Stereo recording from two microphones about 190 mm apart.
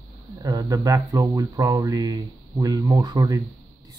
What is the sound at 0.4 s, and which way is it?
Speech, 20° right (ahead or behind).